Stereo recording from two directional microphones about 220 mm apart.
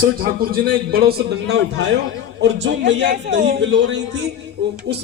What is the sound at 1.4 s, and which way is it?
A man's voice, 50° right (ahead or behind).